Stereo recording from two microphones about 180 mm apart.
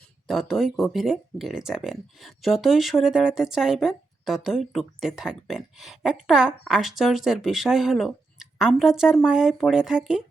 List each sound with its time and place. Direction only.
0.3 s speech: centre (ahead or behind)